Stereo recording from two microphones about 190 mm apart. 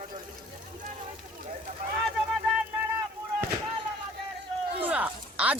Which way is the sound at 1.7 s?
45° right (ahead or behind).